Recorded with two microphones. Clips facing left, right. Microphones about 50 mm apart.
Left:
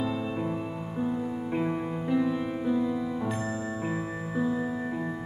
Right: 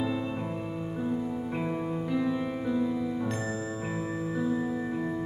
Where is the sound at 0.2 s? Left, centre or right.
Centre.